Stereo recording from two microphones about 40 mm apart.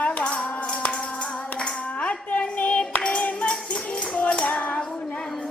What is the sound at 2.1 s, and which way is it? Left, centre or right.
Music, left.